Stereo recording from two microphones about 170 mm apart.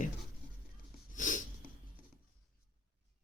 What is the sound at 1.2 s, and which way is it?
Sneeze, 50° left (ahead or behind).